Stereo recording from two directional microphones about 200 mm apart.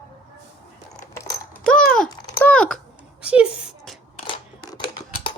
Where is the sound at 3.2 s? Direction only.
5° right (ahead or behind).